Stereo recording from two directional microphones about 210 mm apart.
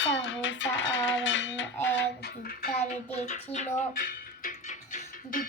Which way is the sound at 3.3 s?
40° left (ahead or behind).